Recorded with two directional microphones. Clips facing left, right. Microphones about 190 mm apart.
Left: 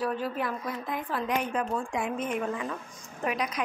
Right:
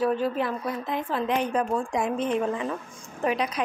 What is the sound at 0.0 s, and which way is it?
Speech, 25° right (ahead or behind).